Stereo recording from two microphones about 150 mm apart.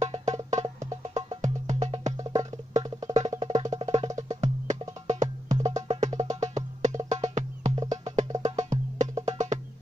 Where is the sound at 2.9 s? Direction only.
25° right (ahead or behind).